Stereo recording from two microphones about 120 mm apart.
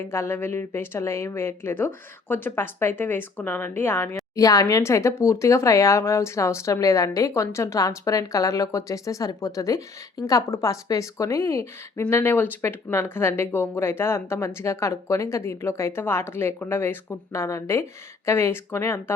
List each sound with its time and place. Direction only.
0.0 s speech: 20° left (ahead or behind)